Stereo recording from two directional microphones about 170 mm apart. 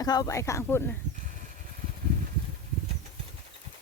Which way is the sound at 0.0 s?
20° left (ahead or behind).